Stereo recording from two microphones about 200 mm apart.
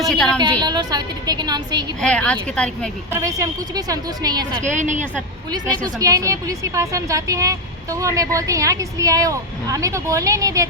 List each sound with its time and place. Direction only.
0.1 s speech: 5° left (ahead or behind)
0.6 s a woman's voice: 20° right (ahead or behind)
2.0 s speech: 5° left (ahead or behind)
3.1 s a woman's voice: 15° right (ahead or behind)
4.6 s a woman's voice: 35° right (ahead or behind)
6.0 s speech: 15° right (ahead or behind)